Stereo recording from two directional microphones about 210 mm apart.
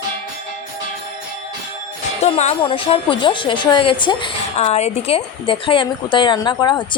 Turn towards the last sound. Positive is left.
turn(degrees=20)  # may be behind; listen again after turning